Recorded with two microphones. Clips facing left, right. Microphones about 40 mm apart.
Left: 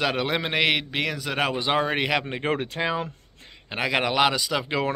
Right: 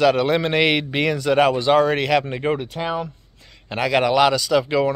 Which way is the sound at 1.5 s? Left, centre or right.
Centre.